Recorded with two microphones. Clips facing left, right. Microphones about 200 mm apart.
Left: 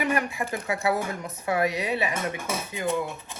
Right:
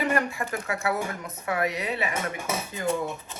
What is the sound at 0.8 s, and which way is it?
Speech, 25° left (ahead or behind).